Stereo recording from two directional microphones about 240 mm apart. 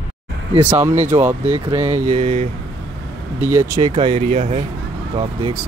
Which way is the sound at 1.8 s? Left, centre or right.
Right.